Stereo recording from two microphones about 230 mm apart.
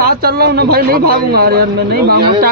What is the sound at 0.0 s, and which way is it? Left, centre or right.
A man's voice, right.